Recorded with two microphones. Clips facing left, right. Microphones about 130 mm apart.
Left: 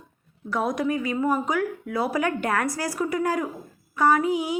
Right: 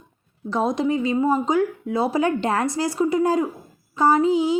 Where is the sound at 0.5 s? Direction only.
25° right (ahead or behind).